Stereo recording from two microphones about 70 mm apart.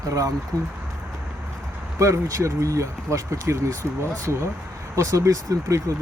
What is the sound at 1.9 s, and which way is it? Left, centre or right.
Speech, right.